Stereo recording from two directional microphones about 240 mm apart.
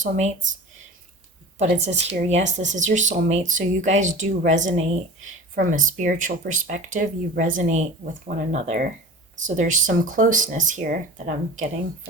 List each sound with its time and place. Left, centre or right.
0.0 s speech: right
1.5 s a woman's voice: right